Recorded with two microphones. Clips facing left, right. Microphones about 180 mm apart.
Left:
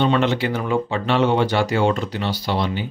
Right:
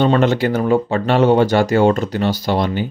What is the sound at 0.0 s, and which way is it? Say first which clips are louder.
Speech: right 4 dB; 45° right (ahead or behind).